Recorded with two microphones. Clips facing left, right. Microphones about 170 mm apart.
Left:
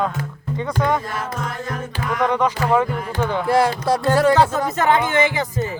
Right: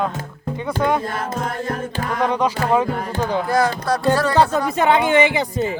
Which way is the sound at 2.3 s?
10° right (ahead or behind).